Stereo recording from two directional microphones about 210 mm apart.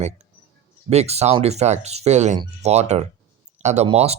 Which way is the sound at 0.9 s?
30° right (ahead or behind).